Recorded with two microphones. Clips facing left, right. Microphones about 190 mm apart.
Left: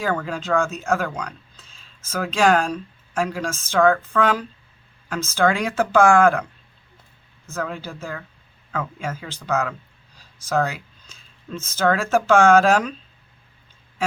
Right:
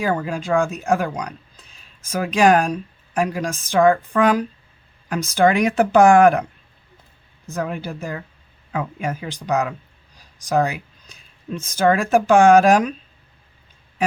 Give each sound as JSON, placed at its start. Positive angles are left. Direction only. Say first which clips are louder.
{"t": 0.0, "sound": "speech", "louder": "right 2 dB", "side_deg": -15}
{"t": 7.4, "sound": "speech", "louder": "right 3 dB", "side_deg": -15}
{"t": 10.2, "sound": "a sound", "louder": "right 3 dB", "side_deg": -15}
{"t": 11.1, "sound": "speech", "louder": "right 3 dB", "side_deg": -15}